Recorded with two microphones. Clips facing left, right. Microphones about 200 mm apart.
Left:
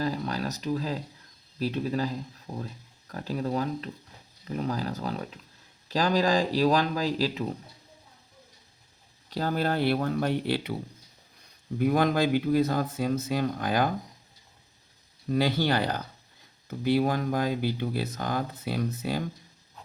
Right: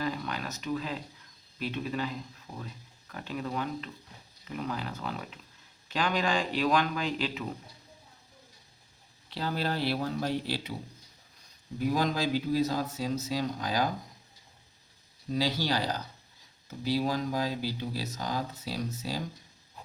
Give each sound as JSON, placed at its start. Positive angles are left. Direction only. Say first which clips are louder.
{"t": 0.0, "sound": "a sound", "louder": "left 4 dB", "side_deg": 35}
{"t": 1.5, "sound": "speech", "louder": "left 5 dB", "side_deg": 35}
{"t": 9.3, "sound": "speech", "louder": "left 5 dB", "side_deg": 45}
{"t": 11.8, "sound": "speech", "louder": "left 5 dB", "side_deg": 60}
{"t": 15.3, "sound": "speech", "louder": "left 4 dB", "side_deg": 55}